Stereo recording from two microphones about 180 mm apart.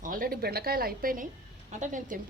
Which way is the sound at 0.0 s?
50° right (ahead or behind).